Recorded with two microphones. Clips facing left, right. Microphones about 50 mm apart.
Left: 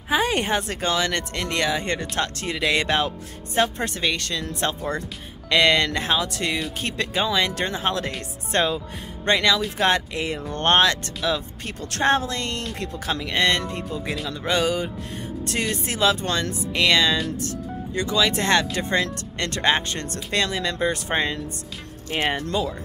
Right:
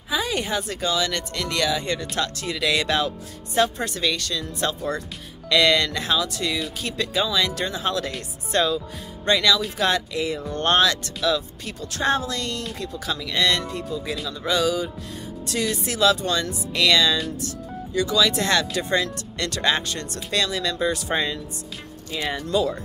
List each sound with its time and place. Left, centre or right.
0.1 s speech: left
5.5 s speech: left